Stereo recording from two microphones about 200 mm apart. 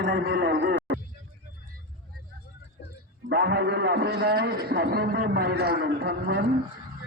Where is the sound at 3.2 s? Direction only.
55° right (ahead or behind).